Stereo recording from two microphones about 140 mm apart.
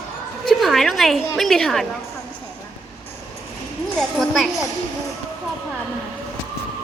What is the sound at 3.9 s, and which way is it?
Speech, centre (ahead or behind).